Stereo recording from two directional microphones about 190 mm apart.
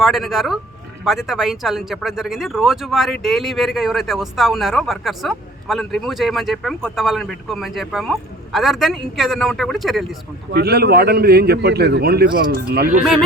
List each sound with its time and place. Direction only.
0.0 s speech: centre (ahead or behind)
10.5 s a man's voice: 55° right (ahead or behind)